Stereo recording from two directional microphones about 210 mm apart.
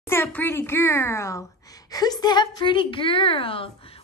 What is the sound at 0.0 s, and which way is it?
Speech, 10° left (ahead or behind).